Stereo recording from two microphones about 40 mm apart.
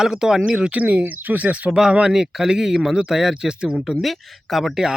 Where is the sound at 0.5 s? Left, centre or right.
Right.